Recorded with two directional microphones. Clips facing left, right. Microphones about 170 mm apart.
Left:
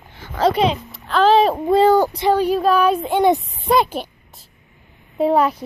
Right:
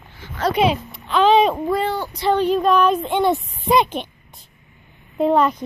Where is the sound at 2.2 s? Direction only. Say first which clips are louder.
Left 1 dB; 10° left (ahead or behind).